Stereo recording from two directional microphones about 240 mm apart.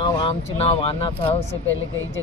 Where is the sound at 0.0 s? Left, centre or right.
Left.